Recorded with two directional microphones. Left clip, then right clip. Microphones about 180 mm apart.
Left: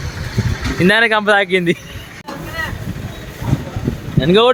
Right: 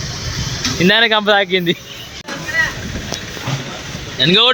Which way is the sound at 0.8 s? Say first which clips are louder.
Even; 5° left (ahead or behind).